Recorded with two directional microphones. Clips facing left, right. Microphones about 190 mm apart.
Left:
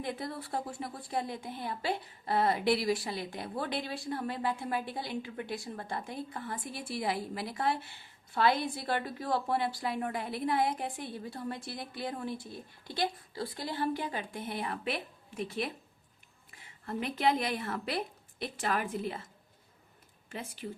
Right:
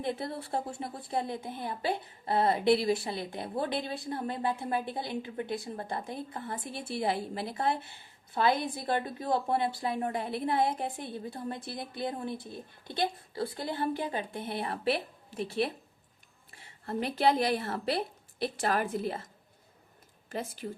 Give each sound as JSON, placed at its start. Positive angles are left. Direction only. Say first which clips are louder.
{"t": 0.0, "sound": "a woman's voice", "louder": "right 3 dB", "side_deg": -25}
{"t": 12.3, "sound": "speech", "louder": "right 1 dB", "side_deg": -55}
{"t": 12.9, "sound": "a woman's voice", "louder": "right 2 dB", "side_deg": -25}
{"t": 20.3, "sound": "a woman's voice", "louder": "right 5 dB", "side_deg": -40}